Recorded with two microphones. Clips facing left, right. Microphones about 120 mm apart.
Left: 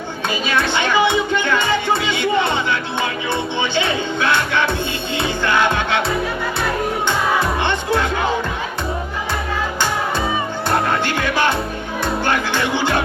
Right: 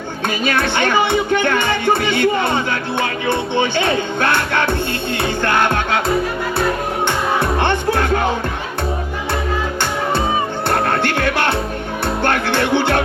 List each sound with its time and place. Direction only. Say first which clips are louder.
0.4 s music: right 2 dB; 50° right (ahead or behind)
7.1 s music: even; 55° right (ahead or behind)
10.7 s music: even; 55° right (ahead or behind)